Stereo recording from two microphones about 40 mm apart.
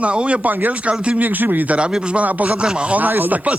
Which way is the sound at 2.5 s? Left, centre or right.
Right.